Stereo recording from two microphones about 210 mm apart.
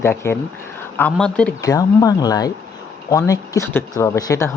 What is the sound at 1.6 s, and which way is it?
Speech, 15° left (ahead or behind).